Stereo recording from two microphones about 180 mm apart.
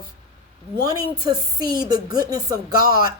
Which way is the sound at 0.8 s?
20° right (ahead or behind).